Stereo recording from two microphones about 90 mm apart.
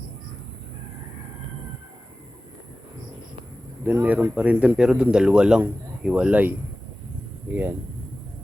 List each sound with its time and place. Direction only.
3.8 s speech: 20° right (ahead or behind)